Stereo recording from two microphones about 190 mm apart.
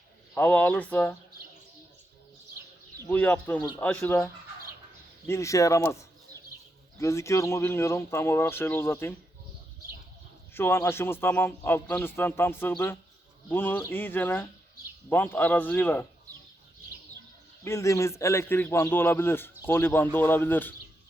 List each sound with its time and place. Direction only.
0.3 s a man's voice: 10° left (ahead or behind)
3.0 s a man's voice: 10° left (ahead or behind)
10.5 s a man's voice: 10° left (ahead or behind)
17.6 s a man's voice: 15° left (ahead or behind)